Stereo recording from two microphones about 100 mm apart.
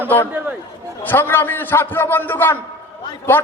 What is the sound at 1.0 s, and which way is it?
A man's voice, 20° left (ahead or behind).